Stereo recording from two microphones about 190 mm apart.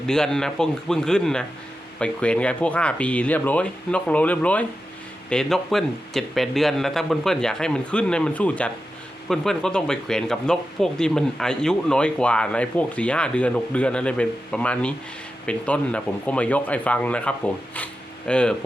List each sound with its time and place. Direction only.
0.0 s speech: 5° left (ahead or behind)